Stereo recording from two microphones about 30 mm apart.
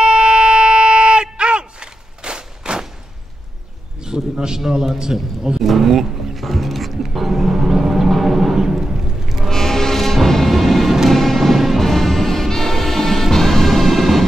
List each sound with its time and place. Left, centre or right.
0.0 s a sound: right
4.0 s a sound: right
4.6 s a man's voice: centre
6.3 s music: centre
8.1 s a sound: centre
8.5 s music: centre
9.5 s music: centre
11.3 s music: centre
11.8 s music: centre